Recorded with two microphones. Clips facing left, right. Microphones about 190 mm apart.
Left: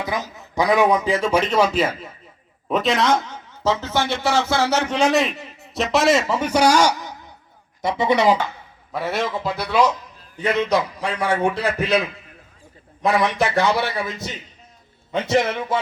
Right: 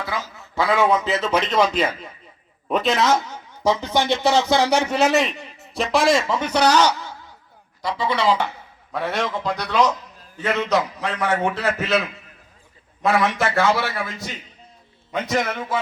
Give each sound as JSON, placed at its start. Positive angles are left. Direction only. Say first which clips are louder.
{"t": 0.0, "sound": "a man's voice", "louder": "left 3 dB", "side_deg": 15}
{"t": 8.1, "sound": "speech", "louder": "left 4 dB", "side_deg": 45}
{"t": 8.9, "sound": "a man's voice", "louder": "left 1 dB", "side_deg": 5}